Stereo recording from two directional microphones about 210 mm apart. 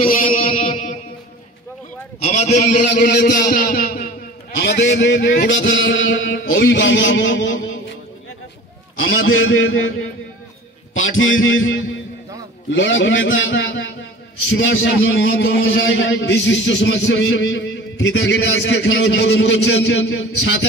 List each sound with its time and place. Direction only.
0.0 s music: 40° left (ahead or behind)
0.4 s music: 25° left (ahead or behind)
2.1 s a man's voice: 30° left (ahead or behind)
4.6 s a man's voice: 55° left (ahead or behind)
8.9 s a man's voice: 75° left (ahead or behind)
11.0 s a man's voice: 70° left (ahead or behind)